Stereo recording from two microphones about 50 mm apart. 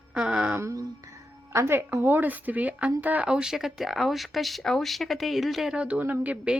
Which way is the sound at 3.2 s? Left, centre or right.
Centre.